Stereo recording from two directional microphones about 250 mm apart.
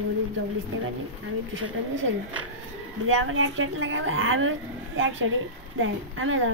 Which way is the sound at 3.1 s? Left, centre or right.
Right.